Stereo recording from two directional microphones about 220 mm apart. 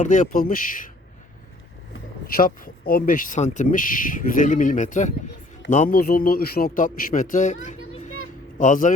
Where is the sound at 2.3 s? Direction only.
40° left (ahead or behind).